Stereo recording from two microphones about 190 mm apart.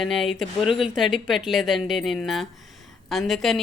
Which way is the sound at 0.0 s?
Centre (ahead or behind).